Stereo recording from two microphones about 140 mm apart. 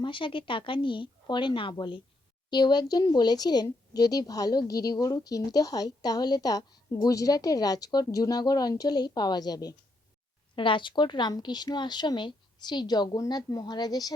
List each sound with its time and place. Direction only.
0.0 s a woman's voice: 35° left (ahead or behind)